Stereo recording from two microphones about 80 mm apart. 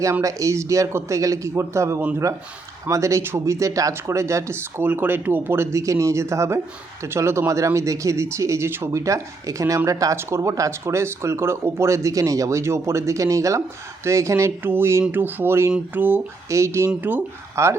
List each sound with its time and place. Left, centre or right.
0.0 s speech: right
4.8 s speech: right
10.2 s speech: right
14.6 s speech: right
16.5 s speech: right
16.9 s speech: right
17.5 s speech: right